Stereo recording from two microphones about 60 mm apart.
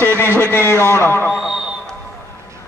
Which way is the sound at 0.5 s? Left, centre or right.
Left.